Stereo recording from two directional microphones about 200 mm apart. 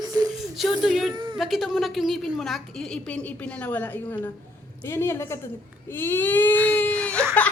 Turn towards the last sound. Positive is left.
turn(degrees=5)  # may be behind; listen again after turning